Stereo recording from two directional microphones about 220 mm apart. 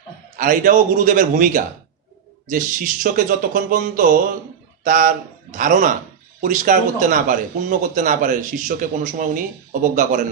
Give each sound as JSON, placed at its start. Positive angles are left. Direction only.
{"t": 0.4, "sound": "speech", "side_deg": -40}